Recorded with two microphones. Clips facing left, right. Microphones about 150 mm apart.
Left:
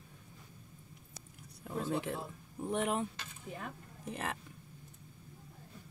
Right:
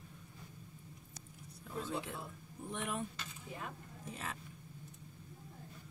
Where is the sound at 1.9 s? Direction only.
65° left (ahead or behind).